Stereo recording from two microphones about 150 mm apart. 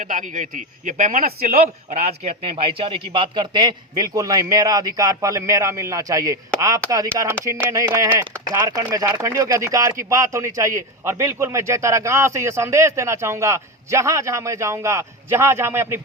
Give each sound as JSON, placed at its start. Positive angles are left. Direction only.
{"t": 0.0, "sound": "speech", "side_deg": -60}